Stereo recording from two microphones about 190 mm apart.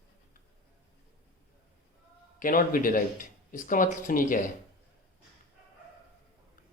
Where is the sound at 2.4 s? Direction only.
45° left (ahead or behind).